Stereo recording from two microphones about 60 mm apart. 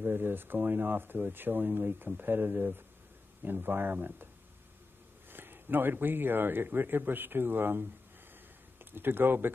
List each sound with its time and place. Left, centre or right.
0.0 s speech: right
5.3 s speech: right